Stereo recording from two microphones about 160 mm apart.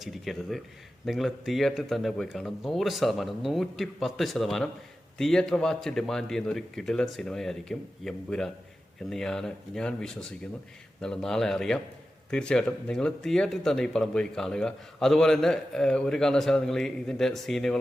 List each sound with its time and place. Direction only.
0.0 s speech: centre (ahead or behind)